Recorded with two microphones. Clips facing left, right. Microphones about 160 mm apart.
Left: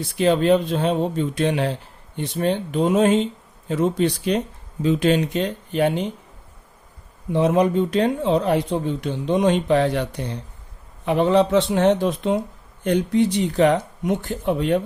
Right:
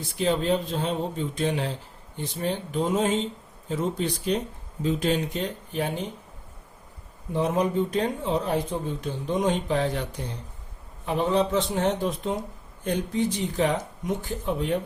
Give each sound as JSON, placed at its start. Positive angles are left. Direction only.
{"t": 0.2, "sound": "speech", "side_deg": 75}
{"t": 7.3, "sound": "speech", "side_deg": 80}